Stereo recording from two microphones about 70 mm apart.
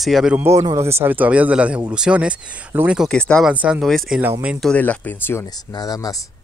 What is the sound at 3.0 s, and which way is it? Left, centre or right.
Speech, centre.